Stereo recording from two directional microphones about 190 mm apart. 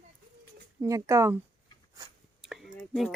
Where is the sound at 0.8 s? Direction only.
15° right (ahead or behind).